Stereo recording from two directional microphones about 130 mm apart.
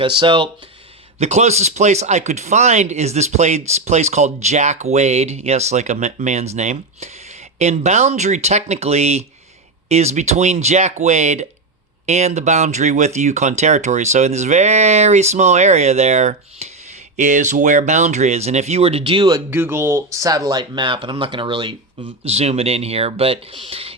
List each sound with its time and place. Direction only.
0.0 s speech: 40° right (ahead or behind)
1.2 s speech: 60° right (ahead or behind); by 19.4 s 35° right (ahead or behind)
19.5 s speech: 15° right (ahead or behind); by 23.9 s 45° right (ahead or behind)